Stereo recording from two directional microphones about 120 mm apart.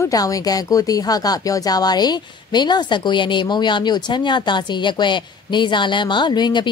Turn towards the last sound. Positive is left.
turn(degrees=40)  # may be behind; listen again after turning